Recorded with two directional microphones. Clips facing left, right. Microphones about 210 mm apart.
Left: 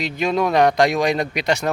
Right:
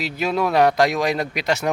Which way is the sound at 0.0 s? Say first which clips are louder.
Left 2 dB; 5° right (ahead or behind).